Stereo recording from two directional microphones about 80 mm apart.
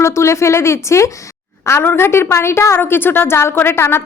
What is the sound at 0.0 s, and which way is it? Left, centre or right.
A woman's voice, left.